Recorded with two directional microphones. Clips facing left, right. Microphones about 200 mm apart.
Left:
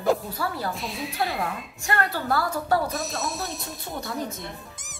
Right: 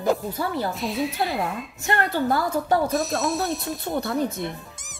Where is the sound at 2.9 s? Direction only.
Centre (ahead or behind).